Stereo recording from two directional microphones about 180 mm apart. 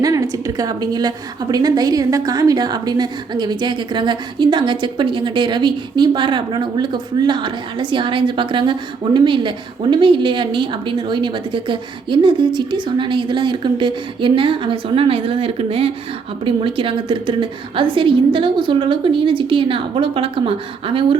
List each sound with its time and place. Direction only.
0.0 s a woman's voice: 20° right (ahead or behind)